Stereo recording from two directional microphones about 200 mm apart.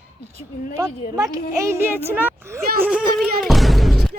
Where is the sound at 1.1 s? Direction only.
15° right (ahead or behind).